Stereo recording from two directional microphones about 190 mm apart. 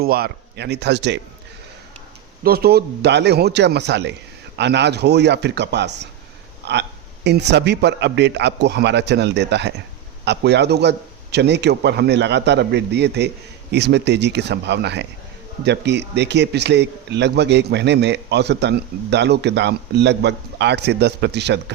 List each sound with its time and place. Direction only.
0.0 s a man's voice: 55° right (ahead or behind)
2.4 s a man's voice: 55° right (ahead or behind)